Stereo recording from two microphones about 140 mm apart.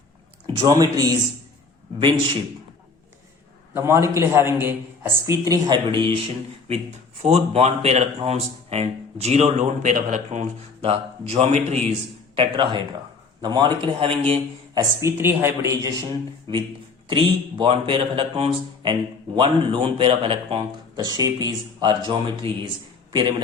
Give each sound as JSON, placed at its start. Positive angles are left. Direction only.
{"t": 0.4, "sound": "a man's voice", "side_deg": -25}
{"t": 3.8, "sound": "a man's voice", "side_deg": -20}
{"t": 7.2, "sound": "speech", "side_deg": -50}
{"t": 10.8, "sound": "speech", "side_deg": -45}
{"t": 12.4, "sound": "a man's voice", "side_deg": -35}
{"t": 14.8, "sound": "a man's voice", "side_deg": -20}
{"t": 16.5, "sound": "a man's voice", "side_deg": -35}